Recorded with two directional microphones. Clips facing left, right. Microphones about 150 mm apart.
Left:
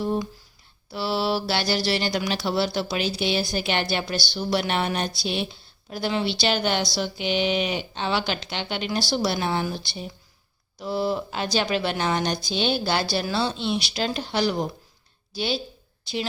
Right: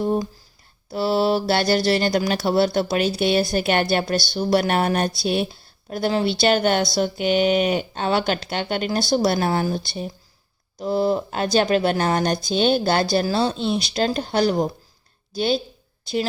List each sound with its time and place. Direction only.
0.0 s a sound: 45° right (ahead or behind)
0.9 s speech: 45° right (ahead or behind)
16.1 s speech: 45° right (ahead or behind)